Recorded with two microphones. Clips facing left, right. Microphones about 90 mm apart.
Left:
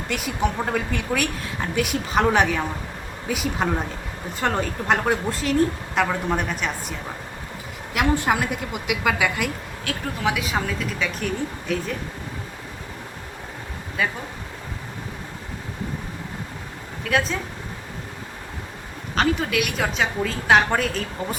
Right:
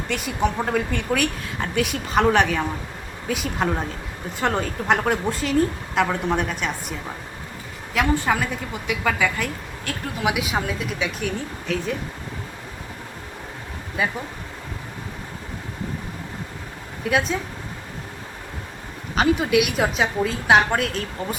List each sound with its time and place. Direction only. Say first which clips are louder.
0.1 s a woman's voice: right 1 dB; centre (ahead or behind)
7.9 s a woman's voice: even; 10° left (ahead or behind)
10.2 s speech: right 1 dB; 10° right (ahead or behind)
11.3 s a woman's voice: left 1 dB; centre (ahead or behind)
14.0 s speech: even; 20° right (ahead or behind)
17.0 s speech: right 1 dB; 15° right (ahead or behind)
19.1 s a woman's voice: right 3 dB; 10° right (ahead or behind)